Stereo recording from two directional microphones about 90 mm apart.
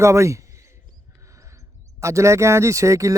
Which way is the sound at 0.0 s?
35° right (ahead or behind).